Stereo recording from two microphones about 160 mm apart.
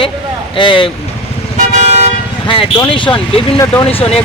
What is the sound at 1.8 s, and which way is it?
Toot, 45° right (ahead or behind).